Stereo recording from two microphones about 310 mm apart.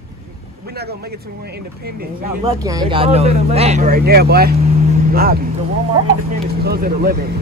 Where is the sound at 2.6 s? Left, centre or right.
Centre; by 5.4 s right.